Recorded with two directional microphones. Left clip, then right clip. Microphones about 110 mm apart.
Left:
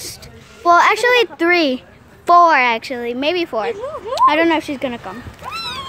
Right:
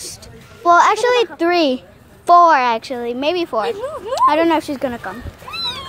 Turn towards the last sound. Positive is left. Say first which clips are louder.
# left 1 dB
turn(degrees=5)  # may be behind; listen again after turning